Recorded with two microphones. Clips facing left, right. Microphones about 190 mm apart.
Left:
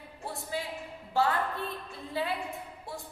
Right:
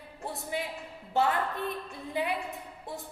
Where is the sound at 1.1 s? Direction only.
20° right (ahead or behind).